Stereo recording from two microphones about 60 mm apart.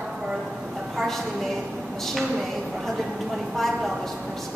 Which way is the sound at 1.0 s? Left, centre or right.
Centre.